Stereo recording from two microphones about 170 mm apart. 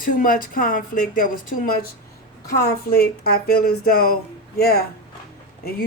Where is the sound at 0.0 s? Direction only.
55° left (ahead or behind).